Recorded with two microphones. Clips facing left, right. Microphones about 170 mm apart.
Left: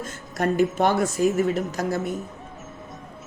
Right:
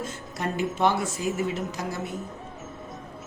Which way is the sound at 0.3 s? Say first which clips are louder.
Left 7 dB; 50° left (ahead or behind).